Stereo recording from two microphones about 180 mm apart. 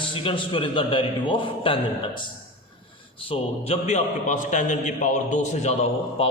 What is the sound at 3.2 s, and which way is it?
A man's voice, 30° left (ahead or behind).